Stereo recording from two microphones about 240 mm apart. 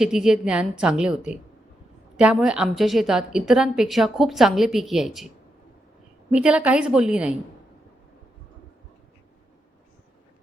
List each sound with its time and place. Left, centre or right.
0.0 s a woman's voice: centre
6.3 s a woman's voice: centre